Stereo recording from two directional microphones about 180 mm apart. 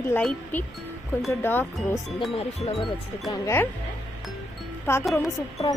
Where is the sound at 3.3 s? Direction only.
15° left (ahead or behind).